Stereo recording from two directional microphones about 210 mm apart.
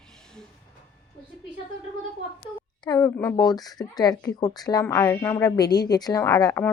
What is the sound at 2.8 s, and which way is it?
Speech, 15° left (ahead or behind).